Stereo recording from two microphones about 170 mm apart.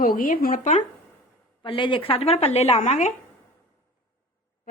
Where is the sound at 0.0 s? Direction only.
55° left (ahead or behind).